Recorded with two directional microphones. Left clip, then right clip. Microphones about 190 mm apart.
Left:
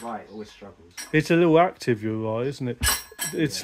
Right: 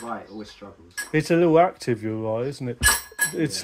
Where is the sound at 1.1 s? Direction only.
30° left (ahead or behind).